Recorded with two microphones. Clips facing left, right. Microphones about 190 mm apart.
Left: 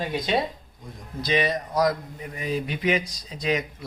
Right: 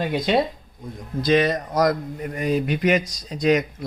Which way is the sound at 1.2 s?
50° right (ahead or behind).